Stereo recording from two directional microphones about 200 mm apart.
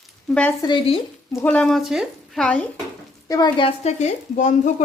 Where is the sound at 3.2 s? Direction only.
20° left (ahead or behind).